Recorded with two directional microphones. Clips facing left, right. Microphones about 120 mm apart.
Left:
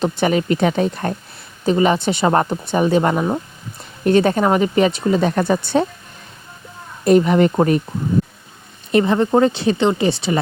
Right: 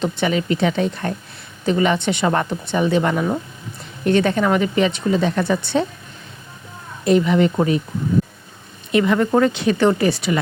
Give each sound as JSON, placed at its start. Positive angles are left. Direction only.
{"t": 0.0, "sound": "speech", "side_deg": 40}
{"t": 7.0, "sound": "speech", "side_deg": 45}
{"t": 8.9, "sound": "speech", "side_deg": 35}